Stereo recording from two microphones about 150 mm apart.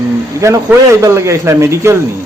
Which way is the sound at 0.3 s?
20° right (ahead or behind).